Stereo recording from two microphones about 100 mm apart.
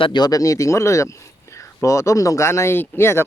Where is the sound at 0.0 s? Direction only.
45° left (ahead or behind).